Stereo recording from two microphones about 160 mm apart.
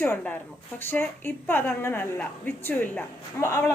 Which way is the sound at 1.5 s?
15° left (ahead or behind).